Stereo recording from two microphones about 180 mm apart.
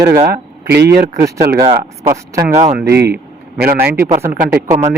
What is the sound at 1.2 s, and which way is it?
Speech, 20° right (ahead or behind).